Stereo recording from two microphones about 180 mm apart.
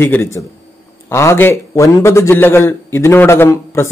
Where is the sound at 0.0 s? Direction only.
10° left (ahead or behind).